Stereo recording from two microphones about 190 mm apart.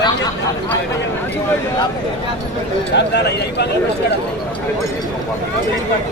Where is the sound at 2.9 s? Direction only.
60° left (ahead or behind).